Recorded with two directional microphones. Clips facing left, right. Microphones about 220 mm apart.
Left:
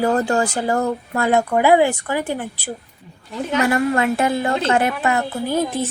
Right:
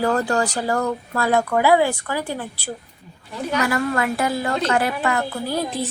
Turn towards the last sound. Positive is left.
turn(degrees=20)  # may be behind; listen again after turning